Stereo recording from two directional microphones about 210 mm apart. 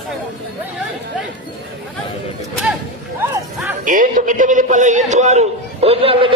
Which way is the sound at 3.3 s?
10° right (ahead or behind).